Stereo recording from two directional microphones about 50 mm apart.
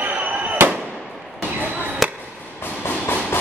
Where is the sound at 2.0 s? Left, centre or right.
Centre.